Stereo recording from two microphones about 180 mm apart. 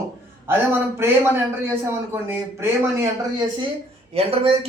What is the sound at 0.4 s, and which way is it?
Speech, 10° right (ahead or behind).